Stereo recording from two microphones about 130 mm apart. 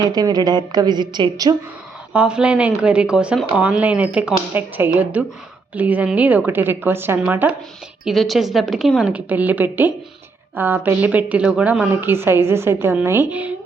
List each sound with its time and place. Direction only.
0.0 s a woman's voice: 30° right (ahead or behind)
2.1 s a woman's voice: 10° right (ahead or behind)
8.0 s a woman's voice: centre (ahead or behind)